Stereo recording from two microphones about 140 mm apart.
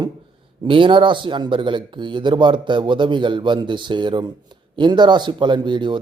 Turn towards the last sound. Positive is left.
turn(degrees=-35)  # may be behind; listen again after turning